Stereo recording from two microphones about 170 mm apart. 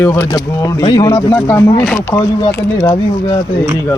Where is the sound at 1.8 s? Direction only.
5° left (ahead or behind).